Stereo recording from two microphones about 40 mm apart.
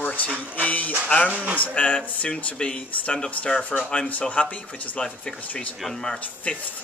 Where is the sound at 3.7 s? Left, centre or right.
Left.